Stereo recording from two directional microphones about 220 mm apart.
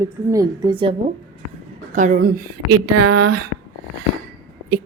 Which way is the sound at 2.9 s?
90° right.